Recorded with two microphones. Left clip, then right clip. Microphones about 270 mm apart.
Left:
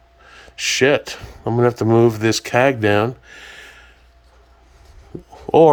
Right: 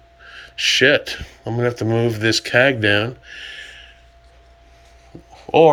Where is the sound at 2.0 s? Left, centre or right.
Centre.